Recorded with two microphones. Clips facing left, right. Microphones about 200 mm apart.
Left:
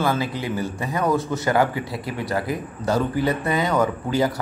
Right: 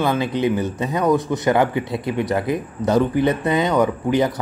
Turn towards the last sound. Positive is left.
turn(degrees=-20)  # may be behind; listen again after turning